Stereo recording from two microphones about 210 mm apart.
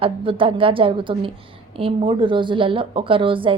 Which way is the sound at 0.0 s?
25° right (ahead or behind).